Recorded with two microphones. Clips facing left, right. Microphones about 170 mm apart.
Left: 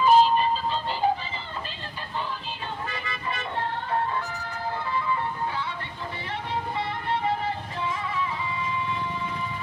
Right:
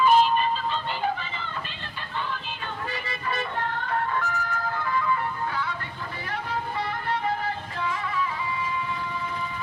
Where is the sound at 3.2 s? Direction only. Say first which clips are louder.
Right 1 dB; 25° left (ahead or behind).